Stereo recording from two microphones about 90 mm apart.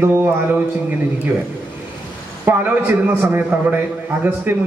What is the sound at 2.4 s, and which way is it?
A man's voice, 20° right (ahead or behind).